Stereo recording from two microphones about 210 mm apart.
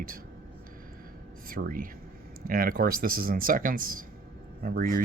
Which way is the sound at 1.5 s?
40° right (ahead or behind).